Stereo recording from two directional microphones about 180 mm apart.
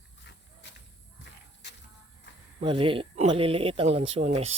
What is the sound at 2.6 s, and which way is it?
Speech, 30° right (ahead or behind).